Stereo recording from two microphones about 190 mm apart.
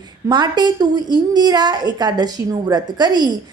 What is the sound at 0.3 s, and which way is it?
A woman's voice, 20° right (ahead or behind).